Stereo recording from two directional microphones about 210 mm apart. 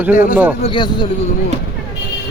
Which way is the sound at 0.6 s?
25° left (ahead or behind).